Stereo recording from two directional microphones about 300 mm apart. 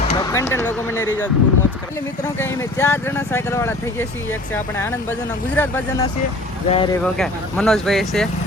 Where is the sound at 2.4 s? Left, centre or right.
Centre.